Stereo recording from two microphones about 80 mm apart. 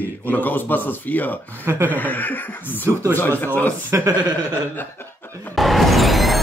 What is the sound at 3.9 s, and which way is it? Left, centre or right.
Speech, right.